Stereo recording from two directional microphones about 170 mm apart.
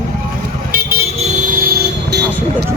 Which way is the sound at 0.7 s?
60° right (ahead or behind).